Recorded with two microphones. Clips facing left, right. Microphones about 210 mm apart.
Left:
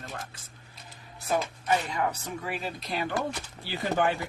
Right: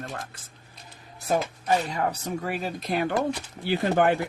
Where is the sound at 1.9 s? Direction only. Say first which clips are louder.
Right 3 dB; 40° right (ahead or behind); by 4.1 s 55° right (ahead or behind).